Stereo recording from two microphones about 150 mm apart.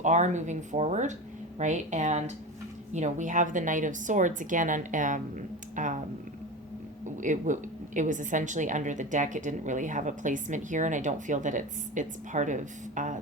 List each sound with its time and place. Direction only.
0.0 s a woman's voice: 50° right (ahead or behind)
5.7 s a sound: 60° right (ahead or behind)
7.2 s a woman's voice: 55° right (ahead or behind)